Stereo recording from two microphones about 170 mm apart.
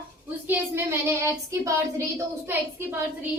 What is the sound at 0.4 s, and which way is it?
Child singing, 10° right (ahead or behind).